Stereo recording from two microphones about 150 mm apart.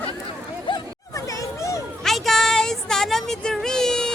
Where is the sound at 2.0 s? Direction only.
Centre (ahead or behind).